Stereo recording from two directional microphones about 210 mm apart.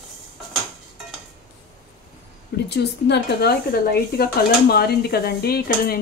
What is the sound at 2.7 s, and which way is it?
Speech, 50° left (ahead or behind).